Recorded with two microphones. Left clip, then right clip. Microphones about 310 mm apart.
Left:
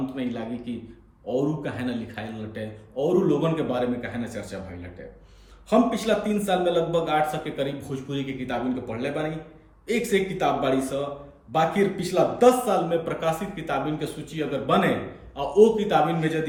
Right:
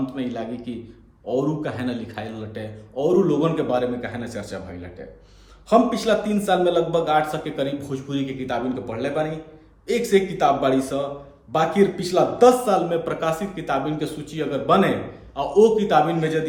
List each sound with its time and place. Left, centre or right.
0.0 s a man's voice: centre